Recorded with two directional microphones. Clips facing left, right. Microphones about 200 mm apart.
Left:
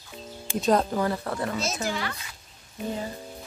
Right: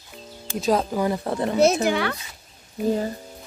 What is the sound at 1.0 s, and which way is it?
Speech, 20° right (ahead or behind).